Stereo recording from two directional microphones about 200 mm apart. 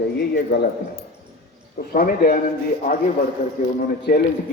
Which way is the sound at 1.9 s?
45° left (ahead or behind).